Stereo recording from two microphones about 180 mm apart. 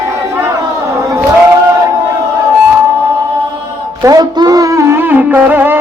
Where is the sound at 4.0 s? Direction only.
20° right (ahead or behind).